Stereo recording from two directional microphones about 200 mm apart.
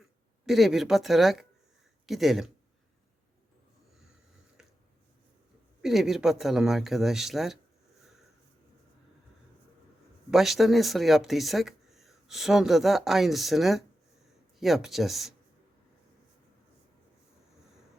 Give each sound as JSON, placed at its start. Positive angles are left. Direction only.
{"t": 0.0, "sound": "speech", "side_deg": 0}
{"t": 5.8, "sound": "speech", "side_deg": 0}
{"t": 10.3, "sound": "speech", "side_deg": 0}